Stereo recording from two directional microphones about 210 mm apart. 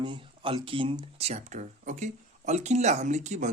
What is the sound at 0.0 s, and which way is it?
Speech, 25° right (ahead or behind).